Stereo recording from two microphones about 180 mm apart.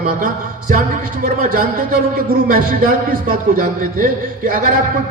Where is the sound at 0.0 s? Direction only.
50° right (ahead or behind).